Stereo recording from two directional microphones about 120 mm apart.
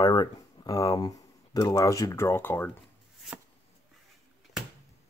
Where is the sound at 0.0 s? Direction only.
35° left (ahead or behind); by 2.7 s 20° left (ahead or behind).